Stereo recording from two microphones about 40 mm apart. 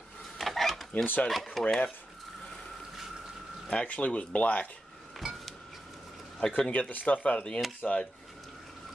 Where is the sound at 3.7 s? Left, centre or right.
Left.